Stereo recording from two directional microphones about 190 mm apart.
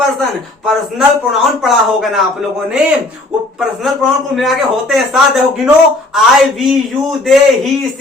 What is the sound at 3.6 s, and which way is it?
A man's voice, centre (ahead or behind).